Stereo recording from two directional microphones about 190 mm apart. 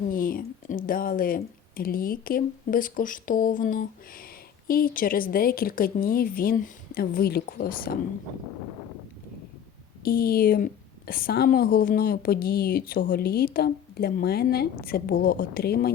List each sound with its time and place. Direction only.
0.1 s a woman's voice: 50° left (ahead or behind)
10.0 s a woman's voice: 50° left (ahead or behind)